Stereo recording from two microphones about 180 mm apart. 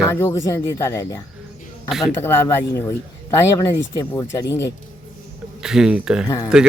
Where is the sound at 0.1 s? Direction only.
15° left (ahead or behind).